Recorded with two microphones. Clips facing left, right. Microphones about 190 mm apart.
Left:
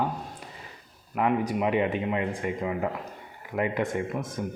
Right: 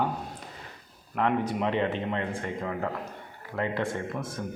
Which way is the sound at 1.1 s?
10° left (ahead or behind).